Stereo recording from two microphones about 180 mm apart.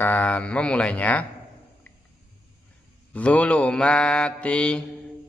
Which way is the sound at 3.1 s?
10° left (ahead or behind).